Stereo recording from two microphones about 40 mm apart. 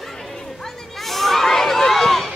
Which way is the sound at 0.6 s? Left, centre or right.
Centre.